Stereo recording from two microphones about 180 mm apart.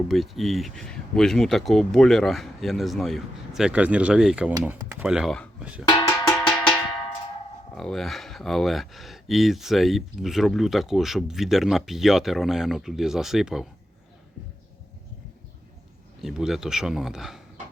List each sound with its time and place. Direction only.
0.1 s speech: centre (ahead or behind)
6.1 s cowbell: 5° left (ahead or behind)
7.8 s speech: centre (ahead or behind)
16.2 s speech: centre (ahead or behind)